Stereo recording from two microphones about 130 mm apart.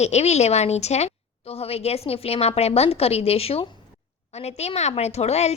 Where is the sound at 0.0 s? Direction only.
60° left (ahead or behind).